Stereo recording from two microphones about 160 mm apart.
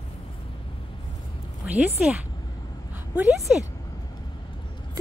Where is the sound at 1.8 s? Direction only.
10° right (ahead or behind).